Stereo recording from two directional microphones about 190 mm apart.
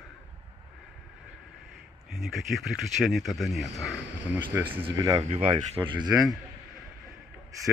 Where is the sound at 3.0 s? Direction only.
Centre (ahead or behind).